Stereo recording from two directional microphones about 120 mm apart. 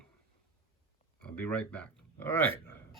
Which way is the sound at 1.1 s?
10° left (ahead or behind).